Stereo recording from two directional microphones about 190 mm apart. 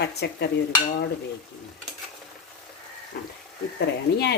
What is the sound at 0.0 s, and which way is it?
Stir, 60° left (ahead or behind).